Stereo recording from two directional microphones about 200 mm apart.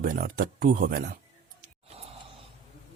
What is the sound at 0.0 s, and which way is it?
Speech, 45° right (ahead or behind).